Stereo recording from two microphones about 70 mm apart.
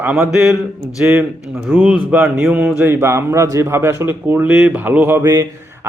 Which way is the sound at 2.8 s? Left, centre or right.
Right.